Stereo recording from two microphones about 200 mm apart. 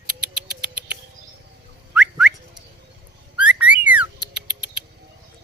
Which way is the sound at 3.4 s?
5° right (ahead or behind).